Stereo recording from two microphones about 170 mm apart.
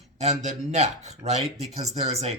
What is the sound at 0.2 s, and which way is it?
Speech, 40° right (ahead or behind).